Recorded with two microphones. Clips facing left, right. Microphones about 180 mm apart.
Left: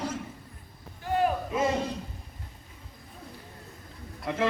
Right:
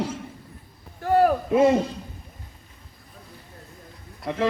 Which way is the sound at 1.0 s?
55° right (ahead or behind).